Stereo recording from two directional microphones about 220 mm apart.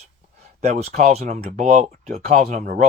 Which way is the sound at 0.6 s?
30° right (ahead or behind).